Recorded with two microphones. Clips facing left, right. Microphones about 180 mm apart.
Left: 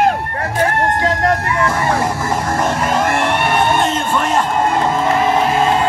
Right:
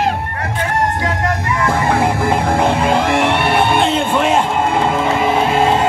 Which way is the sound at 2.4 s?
60° right (ahead or behind).